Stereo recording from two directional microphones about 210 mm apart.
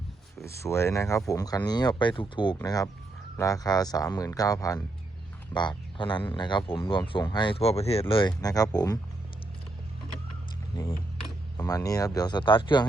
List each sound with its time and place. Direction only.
0.4 s speech: 15° left (ahead or behind)
10.8 s speech: 20° left (ahead or behind)